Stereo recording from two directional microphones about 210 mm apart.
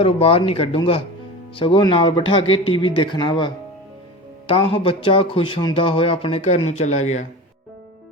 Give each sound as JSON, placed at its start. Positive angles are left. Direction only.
{"t": 0.0, "sound": "speech", "side_deg": 30}